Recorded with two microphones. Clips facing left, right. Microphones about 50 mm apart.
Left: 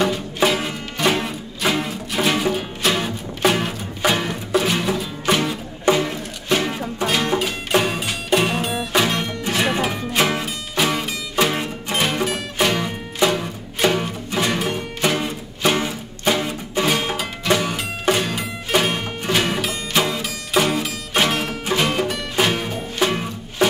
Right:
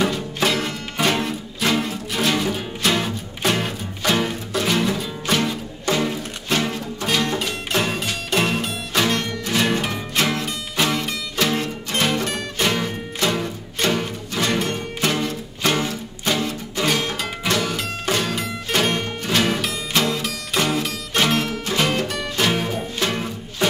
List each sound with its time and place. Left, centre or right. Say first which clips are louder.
0.0 s music: left 2 dB; centre
15.0 s music: left 1 dB; centre